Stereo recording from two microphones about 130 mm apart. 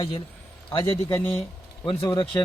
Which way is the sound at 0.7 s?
40° left (ahead or behind).